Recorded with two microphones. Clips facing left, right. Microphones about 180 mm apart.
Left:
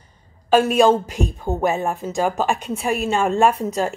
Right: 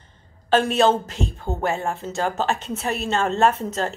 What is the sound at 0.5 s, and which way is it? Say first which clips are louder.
A man's voice: left 3 dB; 10° left (ahead or behind).